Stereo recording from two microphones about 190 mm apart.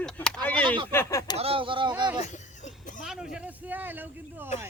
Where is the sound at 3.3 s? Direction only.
10° right (ahead or behind).